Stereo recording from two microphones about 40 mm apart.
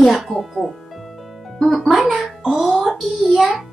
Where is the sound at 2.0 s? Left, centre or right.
Centre.